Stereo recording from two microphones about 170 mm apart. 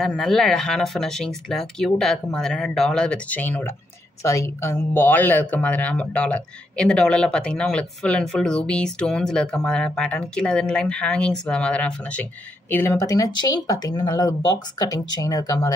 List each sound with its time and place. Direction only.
0.0 s speech: centre (ahead or behind); by 15.7 s 20° left (ahead or behind)